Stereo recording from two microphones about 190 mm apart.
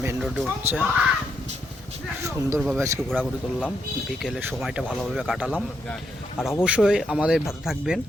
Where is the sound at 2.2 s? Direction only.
15° right (ahead or behind).